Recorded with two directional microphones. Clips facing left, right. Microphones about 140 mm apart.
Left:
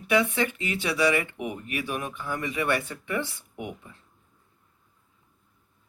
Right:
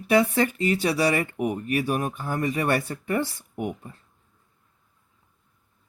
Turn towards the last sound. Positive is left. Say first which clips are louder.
# right 6 dB
turn(degrees=-45)  # may be behind; listen again after turning